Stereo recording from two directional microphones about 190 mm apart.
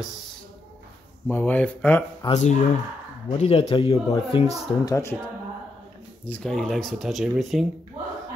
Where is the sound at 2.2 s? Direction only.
35° left (ahead or behind).